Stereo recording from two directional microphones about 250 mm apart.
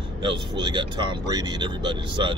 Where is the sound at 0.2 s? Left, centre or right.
Centre.